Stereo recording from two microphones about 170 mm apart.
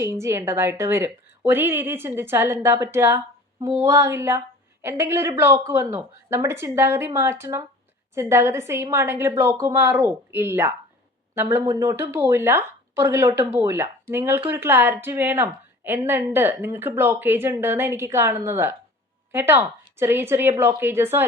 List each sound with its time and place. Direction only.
0.0 s a woman's voice: 15° right (ahead or behind)